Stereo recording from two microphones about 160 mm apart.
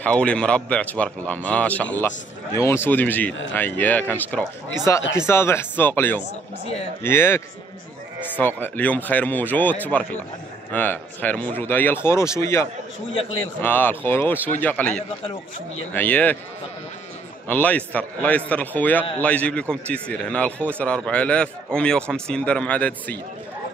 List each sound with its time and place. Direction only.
0.0 s speech: 5° left (ahead or behind)
6.6 s a man's voice: 40° left (ahead or behind)
7.0 s speech: 15° left (ahead or behind)
17.5 s speech: 10° left (ahead or behind)